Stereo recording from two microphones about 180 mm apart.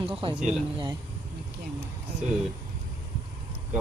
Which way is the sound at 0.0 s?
30° right (ahead or behind).